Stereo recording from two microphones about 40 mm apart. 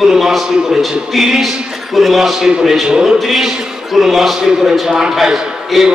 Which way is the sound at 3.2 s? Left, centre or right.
Centre.